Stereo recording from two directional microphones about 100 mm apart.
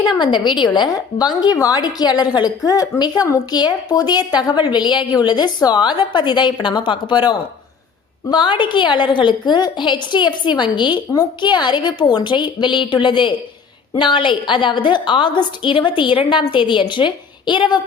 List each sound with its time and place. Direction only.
0.2 s a woman's voice: 50° left (ahead or behind)